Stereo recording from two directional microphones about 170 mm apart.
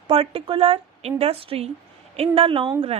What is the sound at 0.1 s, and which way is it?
A woman's voice, 30° right (ahead or behind).